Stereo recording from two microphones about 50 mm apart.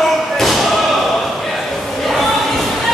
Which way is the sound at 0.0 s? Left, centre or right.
Centre.